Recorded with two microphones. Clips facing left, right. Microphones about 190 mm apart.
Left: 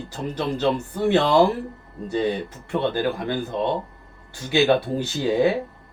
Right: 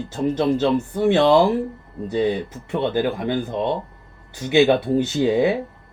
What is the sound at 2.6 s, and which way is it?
Speech, 20° right (ahead or behind).